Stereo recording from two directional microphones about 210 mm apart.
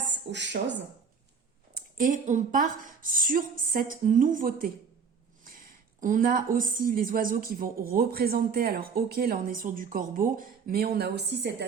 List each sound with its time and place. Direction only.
0.1 s speech: 55° right (ahead or behind)
2.0 s a woman's voice: 40° right (ahead or behind)
5.5 s a sound: 40° right (ahead or behind)
6.6 s speech: 40° right (ahead or behind)